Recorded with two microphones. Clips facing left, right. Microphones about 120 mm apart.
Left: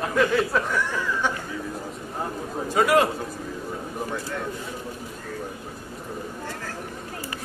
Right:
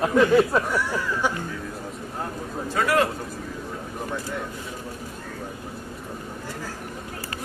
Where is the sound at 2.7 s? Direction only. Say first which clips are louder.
Left 2 dB; 15° left (ahead or behind).